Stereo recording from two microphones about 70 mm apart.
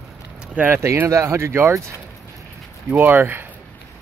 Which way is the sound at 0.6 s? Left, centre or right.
Centre.